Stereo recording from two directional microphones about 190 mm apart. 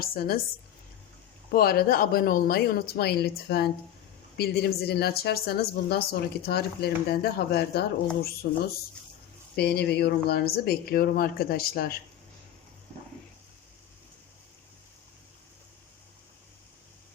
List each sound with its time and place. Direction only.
0.0 s speech: 50° left (ahead or behind)
1.5 s speech: 55° left (ahead or behind)